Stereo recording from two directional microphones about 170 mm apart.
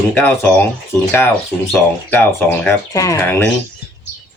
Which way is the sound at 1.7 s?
15° left (ahead or behind).